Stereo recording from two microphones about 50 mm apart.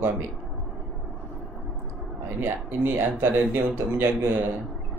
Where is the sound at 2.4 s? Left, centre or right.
Right.